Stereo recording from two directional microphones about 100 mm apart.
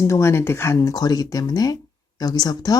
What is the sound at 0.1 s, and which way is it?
Speech, 25° left (ahead or behind).